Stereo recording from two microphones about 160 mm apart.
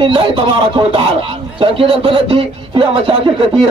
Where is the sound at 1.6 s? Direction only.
35° right (ahead or behind).